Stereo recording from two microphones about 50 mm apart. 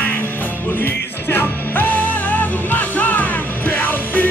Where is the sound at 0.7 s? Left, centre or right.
Left.